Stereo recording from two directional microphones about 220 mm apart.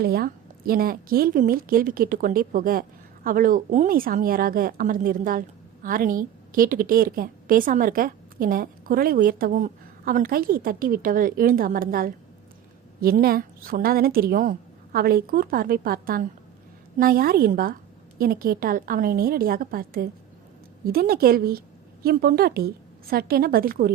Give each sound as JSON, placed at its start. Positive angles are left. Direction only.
{"t": 0.0, "sound": "a woman's voice", "side_deg": -45}